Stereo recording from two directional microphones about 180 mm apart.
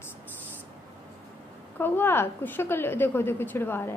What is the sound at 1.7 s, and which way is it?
A woman's voice, 10° left (ahead or behind).